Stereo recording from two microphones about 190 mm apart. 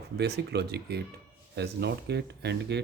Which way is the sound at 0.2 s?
60° right (ahead or behind).